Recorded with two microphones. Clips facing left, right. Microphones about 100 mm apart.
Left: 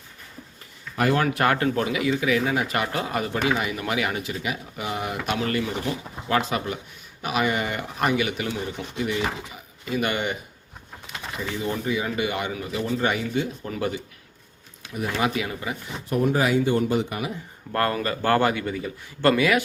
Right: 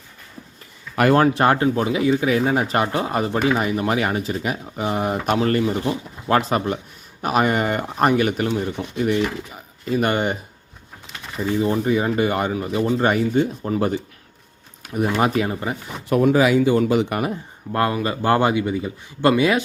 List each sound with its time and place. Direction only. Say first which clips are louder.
1.3 s speech: right 4 dB; 30° right (ahead or behind)
11.6 s speech: right 6 dB; 35° right (ahead or behind)
16.0 s speech: right 6 dB; 90° right
17.7 s a man's voice: right 3 dB; 15° right (ahead or behind)